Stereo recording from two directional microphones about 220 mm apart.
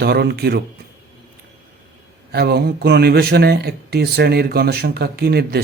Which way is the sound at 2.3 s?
50° right (ahead or behind).